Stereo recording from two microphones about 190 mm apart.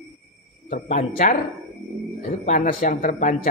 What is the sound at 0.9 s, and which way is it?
Speech, 50° left (ahead or behind).